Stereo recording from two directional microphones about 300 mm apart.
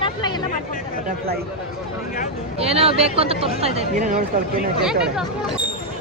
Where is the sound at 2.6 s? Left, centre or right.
Centre.